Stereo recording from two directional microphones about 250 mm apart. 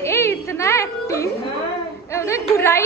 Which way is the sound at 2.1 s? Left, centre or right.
Centre.